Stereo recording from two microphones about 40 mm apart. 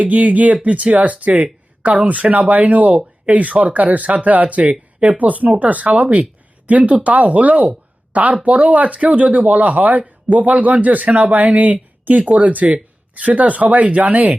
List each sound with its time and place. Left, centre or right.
0.0 s speech: right